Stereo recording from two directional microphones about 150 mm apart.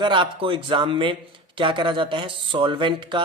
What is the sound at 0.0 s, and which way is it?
A man's voice, 30° right (ahead or behind).